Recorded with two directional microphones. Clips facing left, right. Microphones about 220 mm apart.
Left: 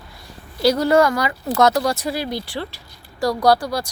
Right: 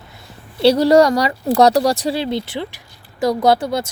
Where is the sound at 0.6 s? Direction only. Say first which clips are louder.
Right 4 dB; 30° right (ahead or behind).